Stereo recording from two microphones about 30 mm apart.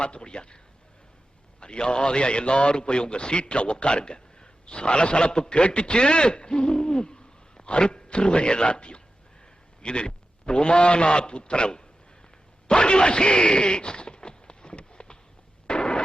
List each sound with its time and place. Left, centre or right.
0.0 s a man's voice: left
1.6 s a man's voice: left
12.6 s a sound: left